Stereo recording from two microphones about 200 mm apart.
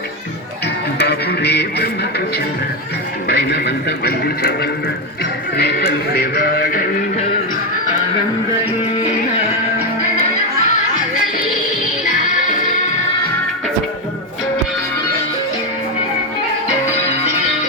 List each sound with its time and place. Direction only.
0.9 s speech: 55° left (ahead or behind)
3.2 s speech: 55° left (ahead or behind)